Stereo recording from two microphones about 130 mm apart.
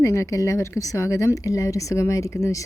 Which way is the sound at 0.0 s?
20° left (ahead or behind).